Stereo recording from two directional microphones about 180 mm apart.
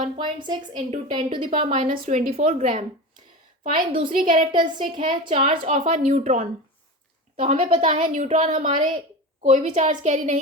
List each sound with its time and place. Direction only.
0.0 s a woman's voice: 25° right (ahead or behind)
1.6 s a woman's voice: 40° right (ahead or behind)
3.8 s a woman's voice: 30° right (ahead or behind)
5.9 s a woman's voice: 45° right (ahead or behind)
7.8 s a woman's voice: 30° right (ahead or behind)
8.0 s a woman's voice: 40° right (ahead or behind)